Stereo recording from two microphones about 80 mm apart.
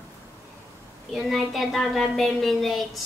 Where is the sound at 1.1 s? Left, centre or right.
Centre.